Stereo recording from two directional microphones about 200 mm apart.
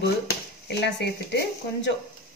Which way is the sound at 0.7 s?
55° left (ahead or behind).